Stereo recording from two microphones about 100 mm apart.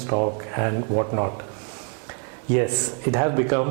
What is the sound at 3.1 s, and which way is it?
Speech, 15° right (ahead or behind).